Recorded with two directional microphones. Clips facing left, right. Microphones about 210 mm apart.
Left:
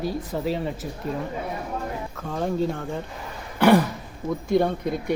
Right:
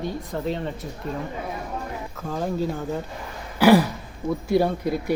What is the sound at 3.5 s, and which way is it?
Throat clearing, 5° right (ahead or behind).